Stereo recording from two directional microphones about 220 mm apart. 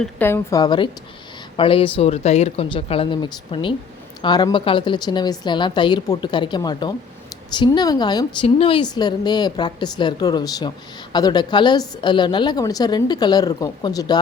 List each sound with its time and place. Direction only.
0.0 s a woman's voice: 10° left (ahead or behind)